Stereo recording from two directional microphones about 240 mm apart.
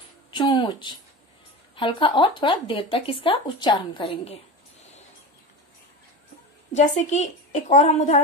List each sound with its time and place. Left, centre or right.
0.3 s speech: centre
6.7 s speech: left